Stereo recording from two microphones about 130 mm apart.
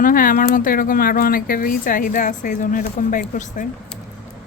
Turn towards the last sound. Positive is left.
turn(degrees=80)